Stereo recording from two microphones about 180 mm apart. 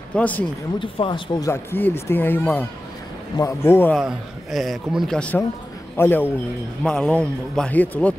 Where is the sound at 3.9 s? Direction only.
Centre (ahead or behind).